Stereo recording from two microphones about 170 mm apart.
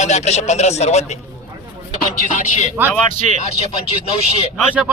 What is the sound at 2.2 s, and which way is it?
A man's voice, 45° left (ahead or behind).